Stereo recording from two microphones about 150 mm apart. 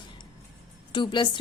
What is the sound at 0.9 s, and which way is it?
Speech, 30° left (ahead or behind).